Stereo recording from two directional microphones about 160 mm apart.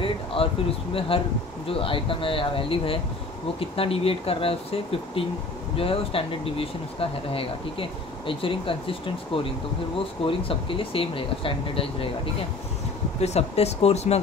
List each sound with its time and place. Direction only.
0.0 s a sound: 35° left (ahead or behind)
0.9 s speech: 35° left (ahead or behind)
5.8 s speech: 35° left (ahead or behind)